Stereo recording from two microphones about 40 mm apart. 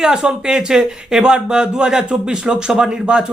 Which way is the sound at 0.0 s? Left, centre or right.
Centre.